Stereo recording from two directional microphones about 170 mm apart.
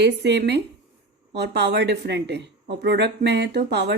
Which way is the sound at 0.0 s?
80° right.